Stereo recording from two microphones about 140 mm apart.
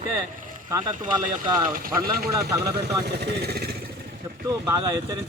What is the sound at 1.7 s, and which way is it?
Speech, 90° right.